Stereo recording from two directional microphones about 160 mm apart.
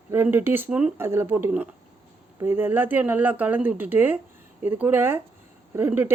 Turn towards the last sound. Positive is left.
turn(degrees=-10)  # may be behind; listen again after turning